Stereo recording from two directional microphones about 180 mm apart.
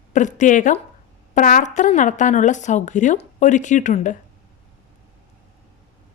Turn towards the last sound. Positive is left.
turn(degrees=45)  # may be behind; listen again after turning